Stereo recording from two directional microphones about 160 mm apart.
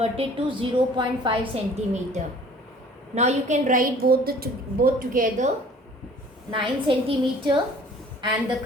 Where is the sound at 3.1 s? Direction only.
45° right (ahead or behind).